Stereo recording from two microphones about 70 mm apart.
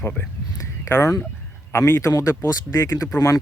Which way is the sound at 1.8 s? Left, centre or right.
Left.